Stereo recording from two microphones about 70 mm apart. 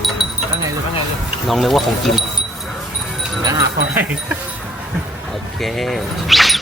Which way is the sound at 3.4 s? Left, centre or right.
Right.